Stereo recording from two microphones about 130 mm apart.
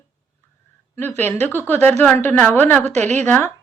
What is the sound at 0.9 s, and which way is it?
Speech, 15° left (ahead or behind).